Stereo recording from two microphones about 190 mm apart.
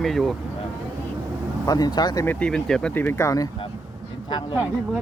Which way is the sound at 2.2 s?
5° left (ahead or behind).